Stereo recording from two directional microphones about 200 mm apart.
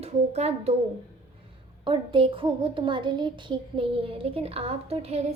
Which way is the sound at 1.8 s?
25° right (ahead or behind).